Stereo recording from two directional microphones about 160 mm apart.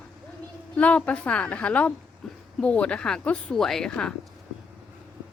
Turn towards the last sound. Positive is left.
turn(degrees=5)  # may be behind; listen again after turning